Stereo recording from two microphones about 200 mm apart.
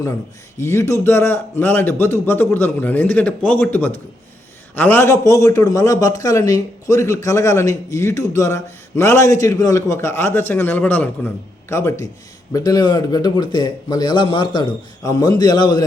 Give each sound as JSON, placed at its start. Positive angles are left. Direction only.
{"t": 0.6, "sound": "a man's voice", "side_deg": 15}